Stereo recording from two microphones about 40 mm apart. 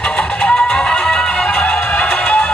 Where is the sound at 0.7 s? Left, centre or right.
Centre.